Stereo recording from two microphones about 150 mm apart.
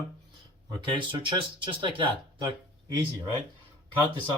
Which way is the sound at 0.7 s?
35° right (ahead or behind).